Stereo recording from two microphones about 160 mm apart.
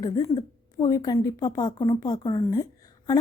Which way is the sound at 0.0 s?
25° left (ahead or behind).